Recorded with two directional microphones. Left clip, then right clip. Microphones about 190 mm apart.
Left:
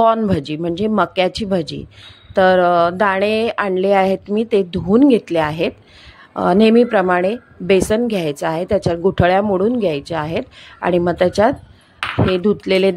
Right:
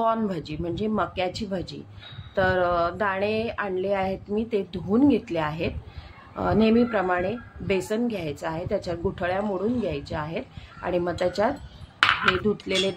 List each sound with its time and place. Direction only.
0.0 s a woman's voice: 45° left (ahead or behind)